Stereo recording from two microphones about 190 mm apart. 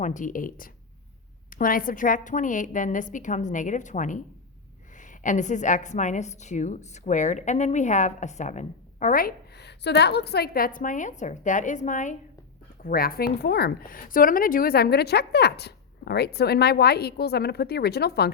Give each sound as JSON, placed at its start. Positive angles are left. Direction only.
{"t": 0.0, "sound": "a woman's voice", "side_deg": 40}
{"t": 12.8, "sound": "a woman's voice", "side_deg": 50}